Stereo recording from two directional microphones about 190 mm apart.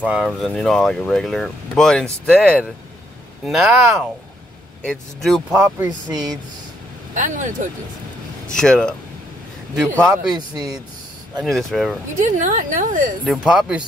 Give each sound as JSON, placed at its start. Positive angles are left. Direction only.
{"t": 0.0, "sound": "speech", "side_deg": -5}
{"t": 4.8, "sound": "speech", "side_deg": 0}
{"t": 5.6, "sound": "speech", "side_deg": -20}
{"t": 7.2, "sound": "a woman's voice", "side_deg": -45}
{"t": 8.5, "sound": "speech", "side_deg": 5}
{"t": 10.3, "sound": "speech", "side_deg": -20}
{"t": 11.4, "sound": "speech", "side_deg": 0}
{"t": 12.2, "sound": "a woman's voice", "side_deg": -40}
{"t": 13.2, "sound": "speech", "side_deg": -5}